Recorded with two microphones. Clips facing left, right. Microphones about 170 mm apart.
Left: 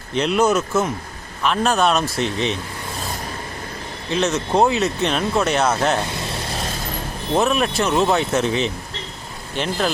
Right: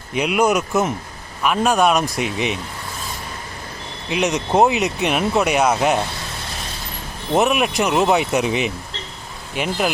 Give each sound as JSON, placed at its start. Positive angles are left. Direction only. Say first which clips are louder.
{"t": 0.1, "sound": "speech", "louder": "even", "side_deg": -10}
{"t": 4.1, "sound": "speech", "louder": "right 1 dB", "side_deg": -15}
{"t": 7.3, "sound": "speech", "louder": "right 1 dB", "side_deg": -15}